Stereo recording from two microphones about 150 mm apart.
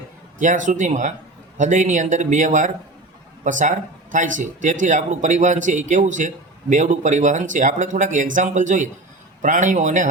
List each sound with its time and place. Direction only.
0.3 s speech: 55° right (ahead or behind)